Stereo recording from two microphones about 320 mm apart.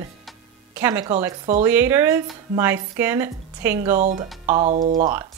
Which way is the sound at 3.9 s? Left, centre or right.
Right.